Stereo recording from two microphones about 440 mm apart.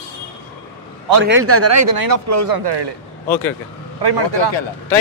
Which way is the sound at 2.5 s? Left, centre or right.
Right.